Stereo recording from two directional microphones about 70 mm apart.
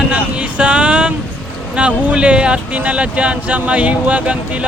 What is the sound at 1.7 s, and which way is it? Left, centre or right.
Speech, centre.